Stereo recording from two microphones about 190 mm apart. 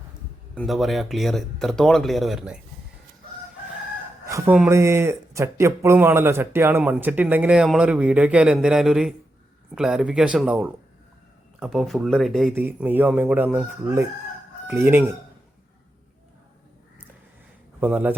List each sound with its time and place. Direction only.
0.5 s speech: centre (ahead or behind)
4.3 s speech: 15° right (ahead or behind); by 12.5 s centre (ahead or behind)
12.5 s speech: 10° right (ahead or behind)
17.7 s speech: 10° right (ahead or behind)